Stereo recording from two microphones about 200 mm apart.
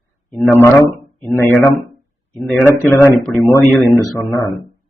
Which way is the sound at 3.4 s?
10° left (ahead or behind).